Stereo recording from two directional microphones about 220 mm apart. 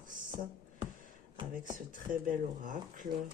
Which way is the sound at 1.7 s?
40° right (ahead or behind).